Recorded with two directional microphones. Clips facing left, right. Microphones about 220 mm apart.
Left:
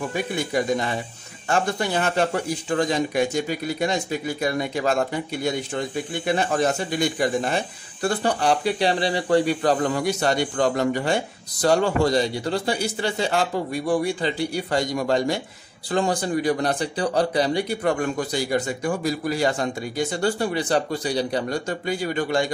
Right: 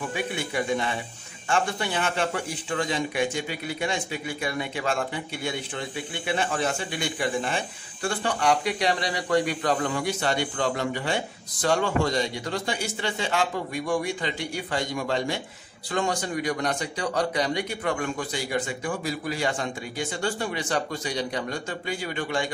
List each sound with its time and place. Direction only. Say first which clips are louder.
0.1 s speech: left 5 dB; 40° left (ahead or behind)